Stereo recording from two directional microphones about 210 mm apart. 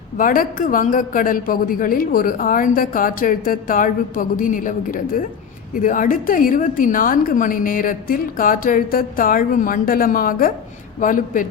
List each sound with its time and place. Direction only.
0.2 s a woman's voice: 40° left (ahead or behind)